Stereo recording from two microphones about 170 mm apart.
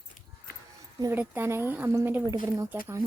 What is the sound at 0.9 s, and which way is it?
Speech, 20° right (ahead or behind).